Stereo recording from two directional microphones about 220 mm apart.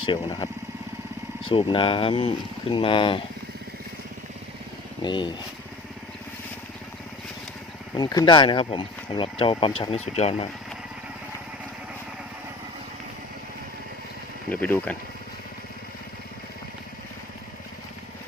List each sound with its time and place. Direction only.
0.0 s speech: 20° left (ahead or behind)
5.0 s speech: 20° left (ahead or behind)
7.9 s speech: 20° left (ahead or behind)
14.5 s speech: 5° left (ahead or behind)